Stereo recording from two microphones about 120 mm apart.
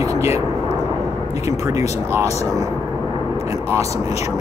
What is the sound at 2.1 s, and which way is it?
Speech, 25° right (ahead or behind).